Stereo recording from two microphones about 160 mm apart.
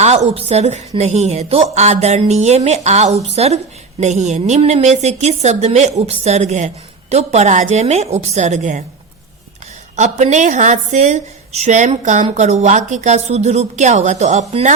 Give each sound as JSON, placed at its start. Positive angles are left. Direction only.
{"t": 0.0, "sound": "a woman's voice", "side_deg": -45}
{"t": 9.9, "sound": "a woman's voice", "side_deg": -45}